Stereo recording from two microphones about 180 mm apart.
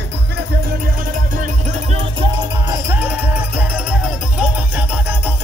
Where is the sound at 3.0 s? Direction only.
10° right (ahead or behind).